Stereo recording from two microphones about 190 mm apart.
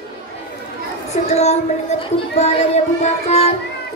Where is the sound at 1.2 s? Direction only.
35° left (ahead or behind).